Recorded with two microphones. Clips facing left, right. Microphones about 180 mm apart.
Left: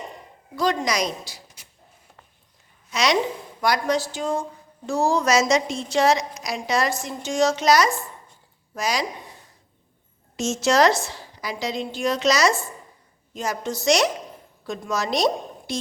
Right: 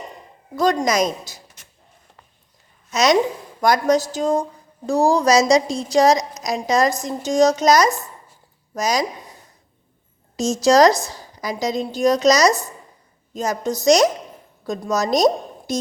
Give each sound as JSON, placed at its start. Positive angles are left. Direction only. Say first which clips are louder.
{"t": 0.6, "sound": "a woman's voice", "louder": "right 5 dB", "side_deg": -45}
{"t": 2.9, "sound": "a woman's voice", "louder": "right 5 dB", "side_deg": -45}
{"t": 10.3, "sound": "a woman's voice", "louder": "right 5 dB", "side_deg": -35}